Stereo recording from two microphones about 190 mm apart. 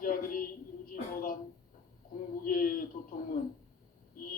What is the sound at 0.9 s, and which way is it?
Speech, 50° left (ahead or behind).